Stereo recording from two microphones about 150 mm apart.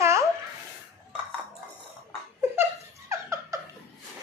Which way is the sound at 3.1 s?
20° right (ahead or behind).